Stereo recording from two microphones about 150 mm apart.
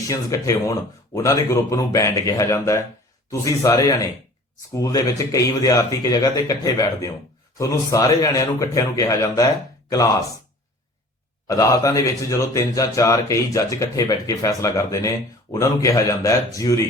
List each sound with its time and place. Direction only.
0.0 s speech: 20° left (ahead or behind)
11.4 s speech: 20° left (ahead or behind)